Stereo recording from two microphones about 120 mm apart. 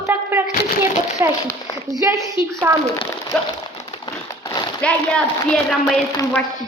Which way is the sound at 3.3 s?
5° left (ahead or behind).